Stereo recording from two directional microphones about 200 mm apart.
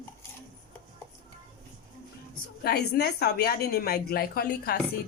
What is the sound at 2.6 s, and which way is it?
A woman's voice, 50° left (ahead or behind).